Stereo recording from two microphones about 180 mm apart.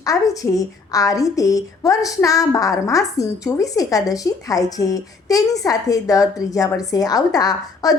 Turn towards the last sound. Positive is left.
turn(degrees=20)  # may be behind; listen again after turning